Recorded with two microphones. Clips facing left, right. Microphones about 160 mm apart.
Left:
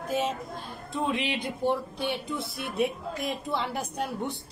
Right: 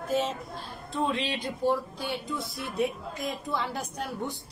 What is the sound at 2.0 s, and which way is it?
Speech, 65° left (ahead or behind).